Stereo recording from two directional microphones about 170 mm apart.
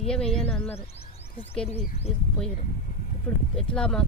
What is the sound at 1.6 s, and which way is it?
Speech, 40° left (ahead or behind).